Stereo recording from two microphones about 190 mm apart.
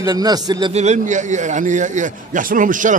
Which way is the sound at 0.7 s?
35° right (ahead or behind).